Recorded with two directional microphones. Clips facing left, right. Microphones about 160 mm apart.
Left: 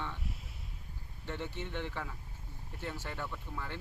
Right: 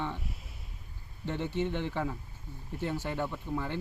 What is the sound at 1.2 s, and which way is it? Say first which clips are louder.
Speech: right 8 dB; 20° right (ahead or behind).